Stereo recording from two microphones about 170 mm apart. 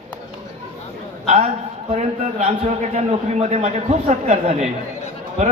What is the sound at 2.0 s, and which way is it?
A man's voice, 45° right (ahead or behind).